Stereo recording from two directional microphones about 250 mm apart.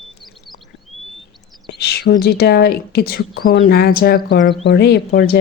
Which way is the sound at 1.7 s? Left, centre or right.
Left.